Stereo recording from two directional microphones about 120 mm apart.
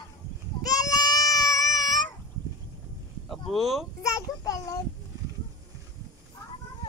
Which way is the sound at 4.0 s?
30° left (ahead or behind).